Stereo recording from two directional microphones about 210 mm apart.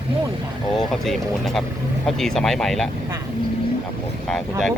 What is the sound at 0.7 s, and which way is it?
Speech, centre (ahead or behind).